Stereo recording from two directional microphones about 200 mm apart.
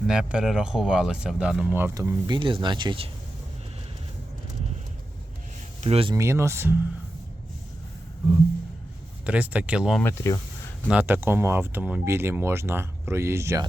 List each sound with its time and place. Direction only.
0.1 s speech: 5° right (ahead or behind); by 3.1 s 25° right (ahead or behind)
5.8 s speech: 30° right (ahead or behind)
6.1 s speech: 15° right (ahead or behind)
9.2 s speech: 5° right (ahead or behind)
10.0 s speech: 15° left (ahead or behind)
10.8 s speech: 10° right (ahead or behind)